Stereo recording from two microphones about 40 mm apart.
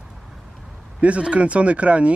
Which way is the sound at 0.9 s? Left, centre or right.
Right.